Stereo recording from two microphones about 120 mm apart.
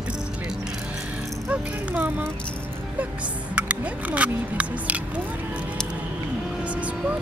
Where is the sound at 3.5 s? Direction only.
10° right (ahead or behind).